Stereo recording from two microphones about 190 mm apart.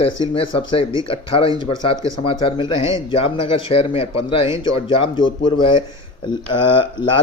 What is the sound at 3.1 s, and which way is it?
Speech, 30° left (ahead or behind).